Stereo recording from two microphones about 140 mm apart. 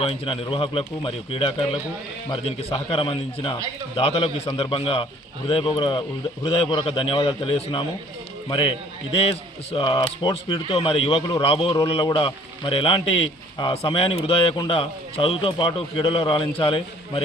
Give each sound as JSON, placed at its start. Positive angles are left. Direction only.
{"t": 0.0, "sound": "a man's voice", "side_deg": 45}